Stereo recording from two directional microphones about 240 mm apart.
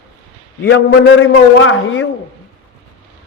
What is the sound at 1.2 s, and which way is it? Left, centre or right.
Speech, left.